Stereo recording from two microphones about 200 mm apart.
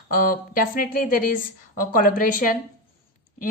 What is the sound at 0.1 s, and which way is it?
Speech, 45° left (ahead or behind).